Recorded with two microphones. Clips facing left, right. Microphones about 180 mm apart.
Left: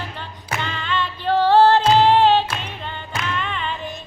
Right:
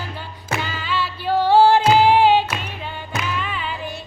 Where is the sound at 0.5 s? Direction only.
5° right (ahead or behind).